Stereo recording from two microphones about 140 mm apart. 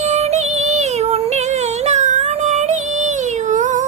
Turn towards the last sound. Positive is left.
turn(degrees=-60)  # may be behind; listen again after turning